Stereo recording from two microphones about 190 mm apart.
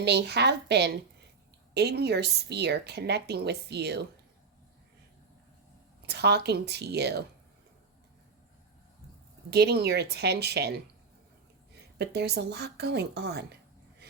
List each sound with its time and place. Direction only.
0.0 s a woman's voice: 60° right (ahead or behind)
6.0 s a woman's voice: 60° right (ahead or behind)
9.5 s a woman's voice: 60° right (ahead or behind)